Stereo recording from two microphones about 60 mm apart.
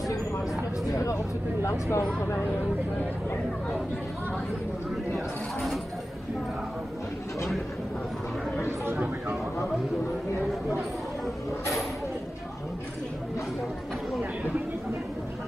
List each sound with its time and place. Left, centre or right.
0.8 s speech: left
5.1 s speech: centre